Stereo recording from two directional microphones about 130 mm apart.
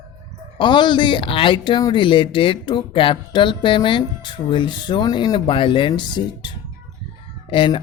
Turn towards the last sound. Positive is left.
turn(degrees=40)  # may be behind; listen again after turning